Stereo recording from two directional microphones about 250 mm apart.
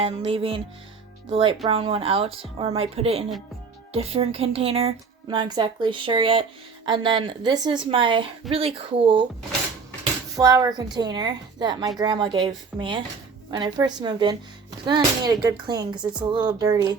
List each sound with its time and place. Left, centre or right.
0.0 s speech: right
10.3 s a woman's voice: centre